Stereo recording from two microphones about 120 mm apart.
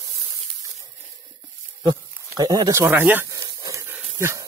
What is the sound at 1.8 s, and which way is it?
Speech, 30° right (ahead or behind).